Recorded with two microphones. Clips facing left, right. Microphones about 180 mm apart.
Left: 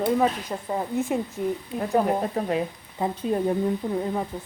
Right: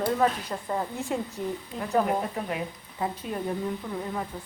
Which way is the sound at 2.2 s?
35° left (ahead or behind).